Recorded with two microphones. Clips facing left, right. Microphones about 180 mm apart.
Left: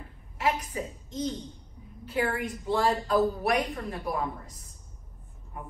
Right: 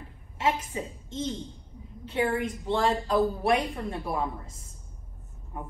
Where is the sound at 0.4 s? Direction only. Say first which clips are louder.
Right 1 dB; 25° right (ahead or behind).